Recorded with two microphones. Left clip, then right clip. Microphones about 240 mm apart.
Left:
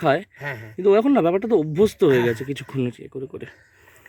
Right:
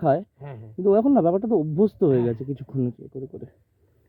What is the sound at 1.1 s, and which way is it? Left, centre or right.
Speech, centre.